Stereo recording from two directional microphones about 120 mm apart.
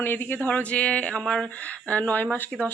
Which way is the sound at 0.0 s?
15° left (ahead or behind).